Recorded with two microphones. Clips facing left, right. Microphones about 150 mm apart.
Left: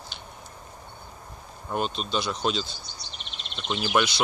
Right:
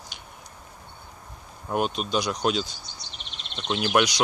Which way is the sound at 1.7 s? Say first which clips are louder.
Right 3 dB; 10° right (ahead or behind).